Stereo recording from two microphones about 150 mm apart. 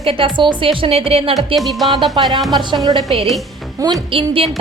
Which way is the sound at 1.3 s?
Centre (ahead or behind).